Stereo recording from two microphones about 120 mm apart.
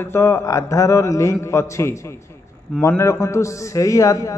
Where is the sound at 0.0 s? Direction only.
20° left (ahead or behind).